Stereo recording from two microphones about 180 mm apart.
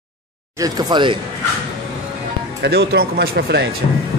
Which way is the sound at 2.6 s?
70° right (ahead or behind).